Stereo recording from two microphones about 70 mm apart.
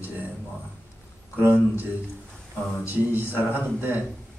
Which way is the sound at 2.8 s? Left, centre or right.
Right.